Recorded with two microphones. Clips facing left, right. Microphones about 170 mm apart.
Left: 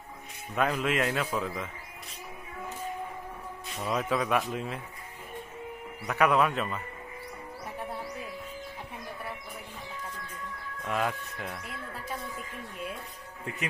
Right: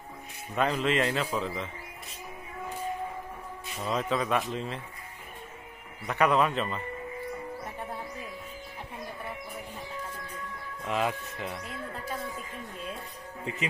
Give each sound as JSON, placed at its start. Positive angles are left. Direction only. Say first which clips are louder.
{"t": 0.6, "sound": "a man's voice", "louder": "right 1 dB", "side_deg": 5}
{"t": 3.6, "sound": "speech", "louder": "even", "side_deg": 5}
{"t": 6.0, "sound": "a man's voice", "louder": "even", "side_deg": 5}
{"t": 10.9, "sound": "a man's voice", "louder": "right 1 dB", "side_deg": -5}